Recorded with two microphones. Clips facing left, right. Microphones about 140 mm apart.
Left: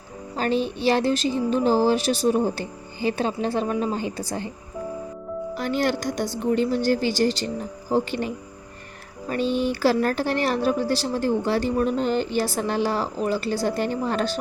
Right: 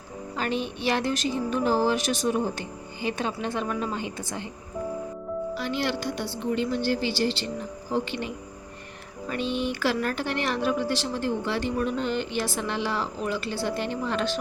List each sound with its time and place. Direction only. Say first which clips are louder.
0.3 s speech: left 5 dB; 35° left (ahead or behind)
5.5 s a woman's voice: left 7 dB; 50° left (ahead or behind)